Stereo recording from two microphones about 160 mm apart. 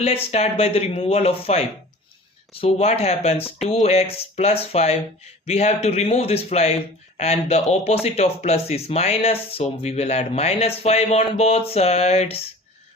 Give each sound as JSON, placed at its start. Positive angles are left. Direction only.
{"t": 0.0, "sound": "speech", "side_deg": 40}